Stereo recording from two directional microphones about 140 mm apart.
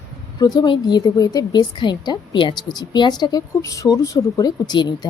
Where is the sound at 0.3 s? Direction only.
30° left (ahead or behind).